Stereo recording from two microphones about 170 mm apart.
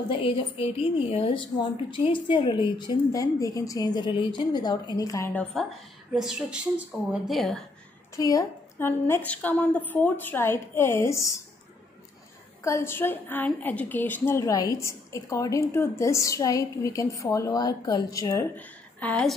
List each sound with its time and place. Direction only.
0.1 s a woman's voice: 30° left (ahead or behind)
6.1 s a woman's voice: 5° right (ahead or behind)
8.2 s a woman's voice: 20° left (ahead or behind)
12.6 s a woman's voice: 15° left (ahead or behind)